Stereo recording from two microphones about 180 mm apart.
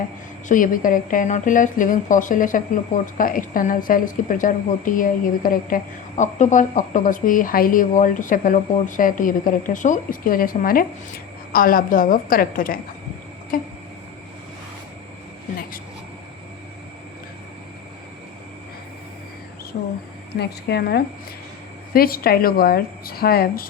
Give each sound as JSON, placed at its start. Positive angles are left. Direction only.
{"t": 0.4, "sound": "speech", "side_deg": 50}
{"t": 19.7, "sound": "speech", "side_deg": 50}
{"t": 20.3, "sound": "speech", "side_deg": 65}